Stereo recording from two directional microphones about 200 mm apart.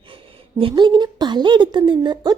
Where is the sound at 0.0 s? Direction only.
25° right (ahead or behind).